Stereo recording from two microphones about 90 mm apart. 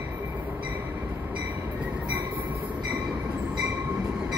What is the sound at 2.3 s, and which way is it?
Train, 20° right (ahead or behind).